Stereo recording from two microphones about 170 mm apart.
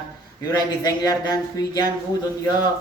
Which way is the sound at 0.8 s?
20° left (ahead or behind).